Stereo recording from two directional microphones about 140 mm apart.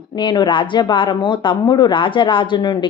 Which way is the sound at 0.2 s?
35° left (ahead or behind).